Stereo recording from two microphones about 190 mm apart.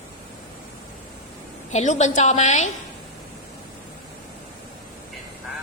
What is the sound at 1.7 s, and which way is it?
A woman's voice, 40° left (ahead or behind).